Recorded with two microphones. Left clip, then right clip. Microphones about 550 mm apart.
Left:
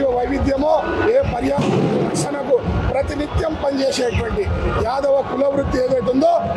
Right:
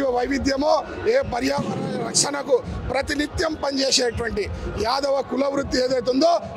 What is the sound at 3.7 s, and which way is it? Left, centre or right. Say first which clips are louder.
A man's voice: left 2 dB; right.